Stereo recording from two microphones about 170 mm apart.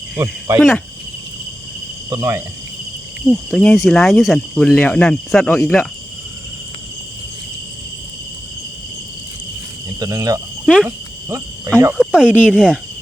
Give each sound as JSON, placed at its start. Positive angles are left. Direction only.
{"t": 0.2, "sound": "speech", "side_deg": -15}
{"t": 2.0, "sound": "speech", "side_deg": -15}
{"t": 3.2, "sound": "speech", "side_deg": 5}
{"t": 10.0, "sound": "speech", "side_deg": -20}
{"t": 10.8, "sound": "cricket", "side_deg": -15}
{"t": 11.9, "sound": "speech", "side_deg": -5}